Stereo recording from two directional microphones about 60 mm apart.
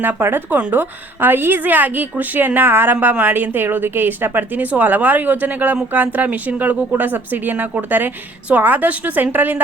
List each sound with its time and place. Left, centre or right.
0.0 s a woman's voice: right